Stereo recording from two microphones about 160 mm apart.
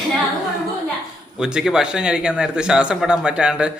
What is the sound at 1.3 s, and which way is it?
Speech, 5° right (ahead or behind).